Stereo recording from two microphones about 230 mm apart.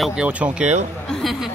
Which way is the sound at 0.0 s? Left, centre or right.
Centre.